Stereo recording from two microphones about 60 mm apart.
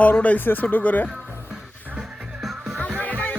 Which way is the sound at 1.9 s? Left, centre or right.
Centre.